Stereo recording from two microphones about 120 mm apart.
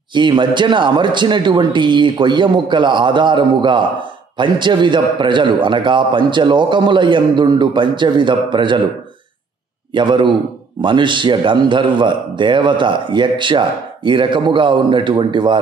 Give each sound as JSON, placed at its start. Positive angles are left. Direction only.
{"t": 0.1, "sound": "a man's voice", "side_deg": -40}
{"t": 9.9, "sound": "a man's voice", "side_deg": -40}